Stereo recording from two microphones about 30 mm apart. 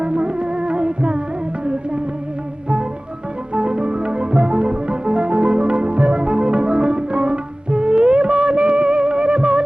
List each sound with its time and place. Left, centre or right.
0.0 s music: right
3.5 s music: right